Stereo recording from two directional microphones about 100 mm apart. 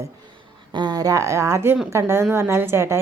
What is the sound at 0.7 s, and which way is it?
A woman's voice, 45° right (ahead or behind).